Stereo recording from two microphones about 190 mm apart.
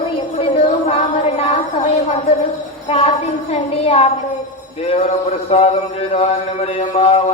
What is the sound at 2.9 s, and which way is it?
A man's voice, 30° left (ahead or behind).